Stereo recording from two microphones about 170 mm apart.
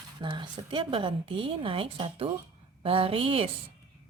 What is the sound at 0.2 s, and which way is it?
A woman's voice, 30° right (ahead or behind).